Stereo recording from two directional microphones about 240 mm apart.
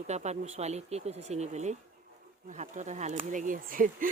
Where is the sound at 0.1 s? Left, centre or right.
Right.